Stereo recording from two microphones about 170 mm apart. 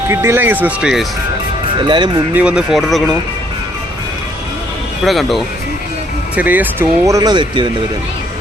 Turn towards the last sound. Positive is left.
turn(degrees=-25)  # may be behind; listen again after turning